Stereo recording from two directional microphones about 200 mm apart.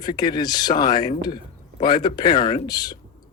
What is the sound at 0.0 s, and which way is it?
Speech, 20° left (ahead or behind).